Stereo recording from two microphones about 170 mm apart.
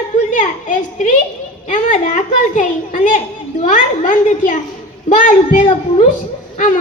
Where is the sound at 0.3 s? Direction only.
50° left (ahead or behind).